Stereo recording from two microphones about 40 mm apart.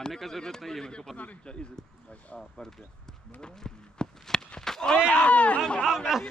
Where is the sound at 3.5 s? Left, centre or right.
Centre.